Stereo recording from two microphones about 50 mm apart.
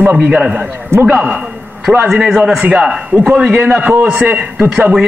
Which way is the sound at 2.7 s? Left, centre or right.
Centre.